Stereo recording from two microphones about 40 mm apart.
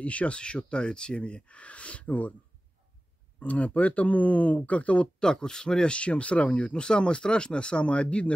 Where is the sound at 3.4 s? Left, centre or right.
Left.